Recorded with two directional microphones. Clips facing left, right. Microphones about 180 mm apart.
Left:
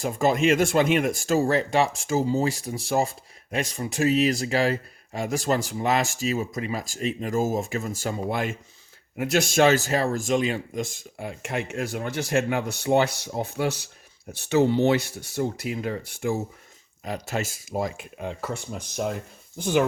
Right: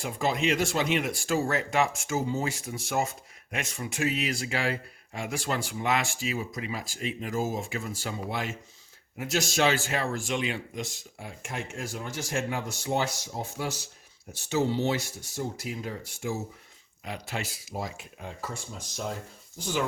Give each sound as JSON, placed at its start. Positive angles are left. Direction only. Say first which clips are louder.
{"t": 0.0, "sound": "speech", "louder": "left 6 dB", "side_deg": 45}
{"t": 17.0, "sound": "speech", "louder": "left 6 dB", "side_deg": 45}